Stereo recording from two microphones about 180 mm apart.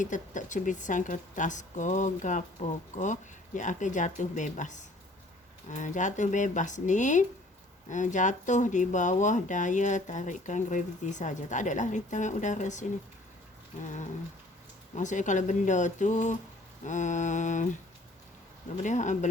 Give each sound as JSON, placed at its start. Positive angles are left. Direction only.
{"t": 0.0, "sound": "speech", "side_deg": 45}
{"t": 13.8, "sound": "speech", "side_deg": 45}
{"t": 18.8, "sound": "speech", "side_deg": 45}